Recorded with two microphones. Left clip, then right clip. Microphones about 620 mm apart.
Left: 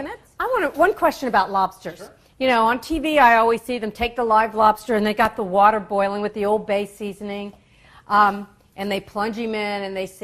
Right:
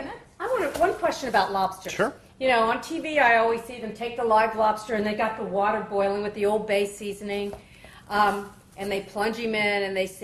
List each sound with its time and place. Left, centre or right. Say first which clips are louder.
0.3 s speech: left 5 dB; left